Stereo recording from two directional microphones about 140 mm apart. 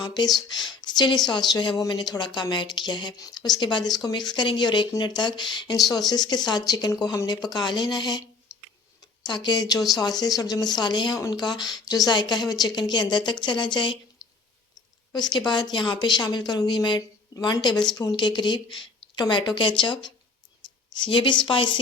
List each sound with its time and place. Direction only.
0.0 s speech: 30° left (ahead or behind)
8.5 s tick-tock: 20° left (ahead or behind)
9.2 s speech: 35° left (ahead or behind)
15.1 s speech: 30° left (ahead or behind)